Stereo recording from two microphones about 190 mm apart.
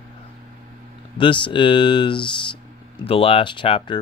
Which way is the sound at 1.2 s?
25° left (ahead or behind).